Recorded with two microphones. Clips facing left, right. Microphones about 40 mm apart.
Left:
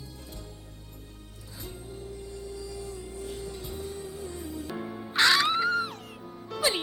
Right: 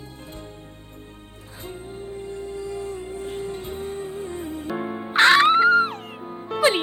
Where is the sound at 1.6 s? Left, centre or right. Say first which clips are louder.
Right 6 dB; right.